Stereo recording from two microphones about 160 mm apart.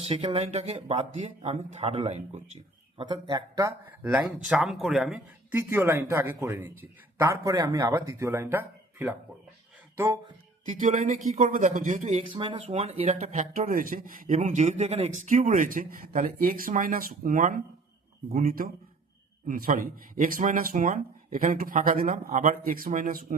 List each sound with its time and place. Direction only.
0.0 s speech: 35° right (ahead or behind)
3.0 s speech: 25° right (ahead or behind)
4.1 s speech: 5° right (ahead or behind)
10.7 s speech: 55° right (ahead or behind)
15.2 s speech: 50° right (ahead or behind)